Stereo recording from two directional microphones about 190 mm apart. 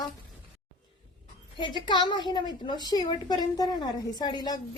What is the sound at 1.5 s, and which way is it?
A woman's voice, 25° left (ahead or behind).